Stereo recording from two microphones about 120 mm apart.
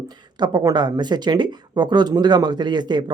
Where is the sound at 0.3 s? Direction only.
35° right (ahead or behind).